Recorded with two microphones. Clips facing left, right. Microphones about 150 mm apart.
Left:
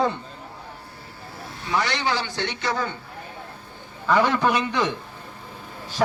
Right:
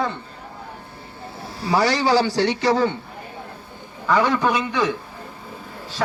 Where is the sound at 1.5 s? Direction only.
35° right (ahead or behind).